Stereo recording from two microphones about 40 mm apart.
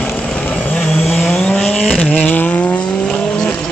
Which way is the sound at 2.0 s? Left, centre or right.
Left.